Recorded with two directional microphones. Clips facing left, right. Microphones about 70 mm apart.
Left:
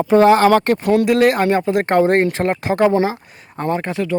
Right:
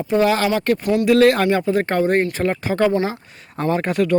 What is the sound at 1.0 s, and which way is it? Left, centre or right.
Speech, left.